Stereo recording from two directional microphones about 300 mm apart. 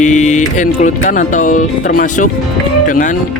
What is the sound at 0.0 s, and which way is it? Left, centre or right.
Music, left.